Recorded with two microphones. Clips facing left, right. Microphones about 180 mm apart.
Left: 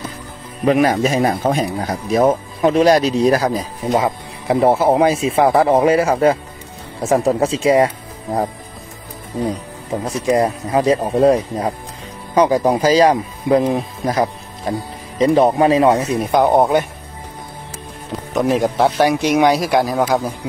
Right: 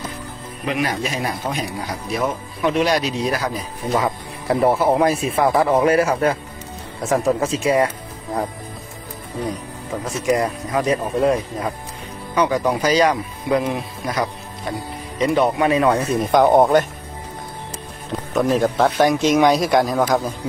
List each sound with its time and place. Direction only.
0.7 s a man's voice: 45° left (ahead or behind)
3.9 s speech: 25° left (ahead or behind)
10.0 s speech: 30° left (ahead or behind)
16.2 s speech: 5° left (ahead or behind)
18.3 s a man's voice: 15° left (ahead or behind)